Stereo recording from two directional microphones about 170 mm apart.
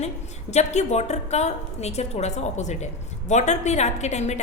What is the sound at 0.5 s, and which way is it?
A woman's voice, 40° left (ahead or behind).